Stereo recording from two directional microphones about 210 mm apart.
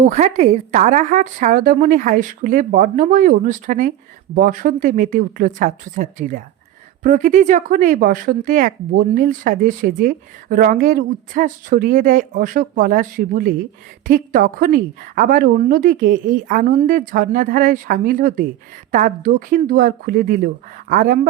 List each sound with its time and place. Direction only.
0.0 s speech: 30° right (ahead or behind)